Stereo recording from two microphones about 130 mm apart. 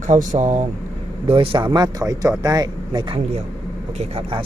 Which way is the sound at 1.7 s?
30° right (ahead or behind).